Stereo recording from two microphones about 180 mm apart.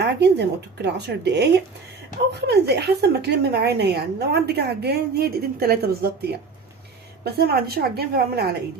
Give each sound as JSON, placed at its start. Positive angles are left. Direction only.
{"t": 0.0, "sound": "a woman's voice", "side_deg": -70}
{"t": 7.3, "sound": "a woman's voice", "side_deg": -60}